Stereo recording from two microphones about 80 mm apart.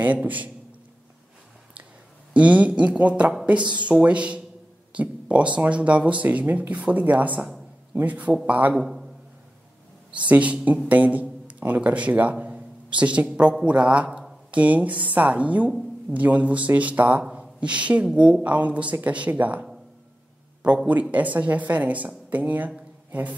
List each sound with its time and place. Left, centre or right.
0.0 s speech: right
2.3 s a woman's voice: centre
8.7 s a man's voice: centre
10.1 s a man's voice: centre
20.6 s speech: centre